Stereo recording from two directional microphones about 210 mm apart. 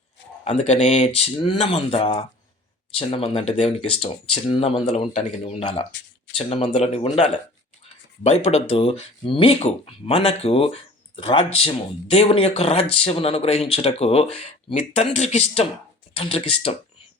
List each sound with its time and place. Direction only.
0.4 s speech: 30° left (ahead or behind)